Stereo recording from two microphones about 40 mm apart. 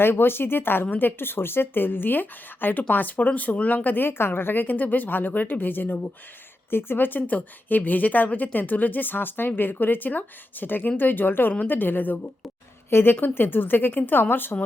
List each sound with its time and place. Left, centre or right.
0.0 s speech: left
3.9 s a woman's voice: left
6.7 s a woman's voice: left
12.9 s speech: left
13.2 s speech: left